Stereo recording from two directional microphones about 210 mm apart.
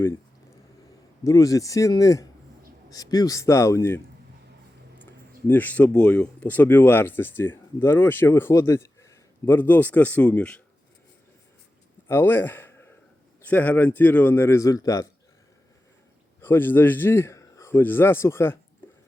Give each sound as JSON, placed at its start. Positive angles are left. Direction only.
{"t": 1.2, "sound": "speech", "side_deg": 15}
{"t": 5.5, "sound": "speech", "side_deg": 10}
{"t": 12.0, "sound": "a man's voice", "side_deg": 10}
{"t": 16.4, "sound": "a man's voice", "side_deg": 10}